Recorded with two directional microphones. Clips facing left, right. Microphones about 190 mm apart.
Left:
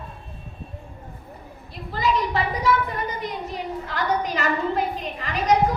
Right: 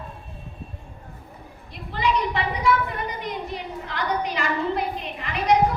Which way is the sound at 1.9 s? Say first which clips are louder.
Left 1 dB; 40° left (ahead or behind).